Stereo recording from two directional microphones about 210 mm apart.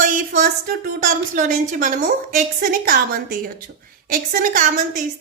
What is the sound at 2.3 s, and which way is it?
Speech, 40° right (ahead or behind).